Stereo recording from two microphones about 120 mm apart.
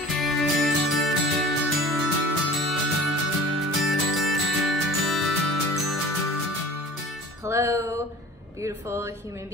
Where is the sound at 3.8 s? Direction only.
Centre (ahead or behind).